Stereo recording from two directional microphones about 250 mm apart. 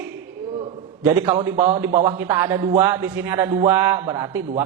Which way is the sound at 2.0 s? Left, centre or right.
Centre.